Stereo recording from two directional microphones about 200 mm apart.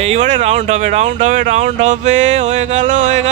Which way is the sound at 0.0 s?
35° right (ahead or behind).